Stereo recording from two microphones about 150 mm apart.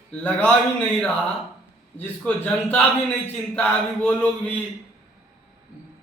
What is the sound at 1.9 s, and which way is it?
A man's voice, 10° left (ahead or behind).